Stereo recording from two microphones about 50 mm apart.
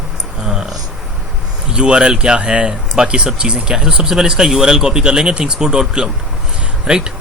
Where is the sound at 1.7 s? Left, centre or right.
Centre.